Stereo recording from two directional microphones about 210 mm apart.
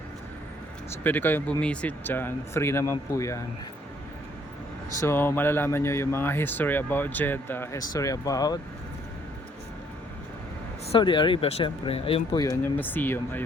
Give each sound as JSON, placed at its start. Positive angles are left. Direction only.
{"t": 0.9, "sound": "speech", "side_deg": 10}
{"t": 4.9, "sound": "speech", "side_deg": 10}
{"t": 10.9, "sound": "speech", "side_deg": 25}